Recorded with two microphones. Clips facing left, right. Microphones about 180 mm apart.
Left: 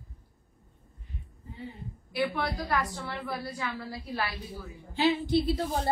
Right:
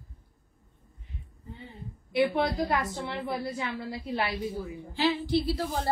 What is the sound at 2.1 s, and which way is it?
A woman's voice, 20° right (ahead or behind).